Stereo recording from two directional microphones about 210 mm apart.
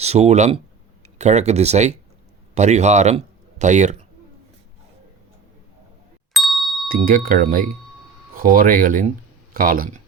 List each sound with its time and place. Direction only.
0.0 s speech: 30° right (ahead or behind)
6.3 s ding: centre (ahead or behind)
6.8 s speech: 40° right (ahead or behind)